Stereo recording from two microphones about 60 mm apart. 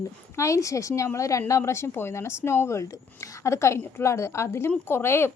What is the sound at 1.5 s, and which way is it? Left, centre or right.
Speech, left.